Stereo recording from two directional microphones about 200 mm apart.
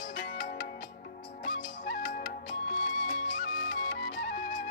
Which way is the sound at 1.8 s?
40° left (ahead or behind).